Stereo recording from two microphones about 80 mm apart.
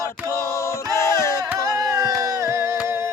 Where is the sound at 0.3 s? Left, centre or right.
Left.